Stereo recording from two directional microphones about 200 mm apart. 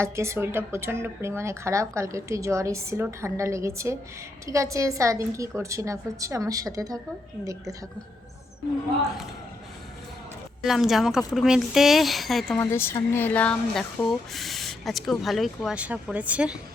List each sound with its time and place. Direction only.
0.0 s speech: 15° right (ahead or behind)
10.6 s speech: centre (ahead or behind)
12.5 s speech: 10° left (ahead or behind); by 16.6 s 5° right (ahead or behind)